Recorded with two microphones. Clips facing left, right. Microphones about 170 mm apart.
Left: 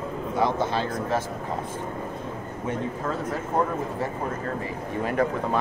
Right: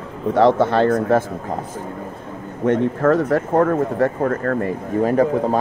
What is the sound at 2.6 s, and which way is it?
Speech, 75° right (ahead or behind).